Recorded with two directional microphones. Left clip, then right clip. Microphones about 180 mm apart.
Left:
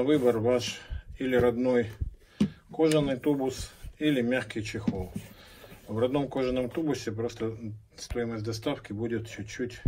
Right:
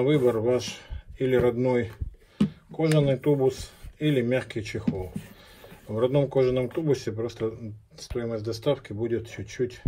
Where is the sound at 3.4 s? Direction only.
40° right (ahead or behind).